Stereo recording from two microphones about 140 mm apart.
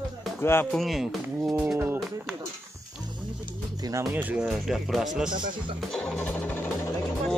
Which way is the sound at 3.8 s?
25° right (ahead or behind).